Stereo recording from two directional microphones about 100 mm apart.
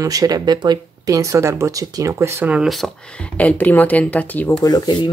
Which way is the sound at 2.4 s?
10° right (ahead or behind).